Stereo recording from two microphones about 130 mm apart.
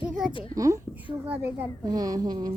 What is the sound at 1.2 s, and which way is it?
Speech, 10° right (ahead or behind).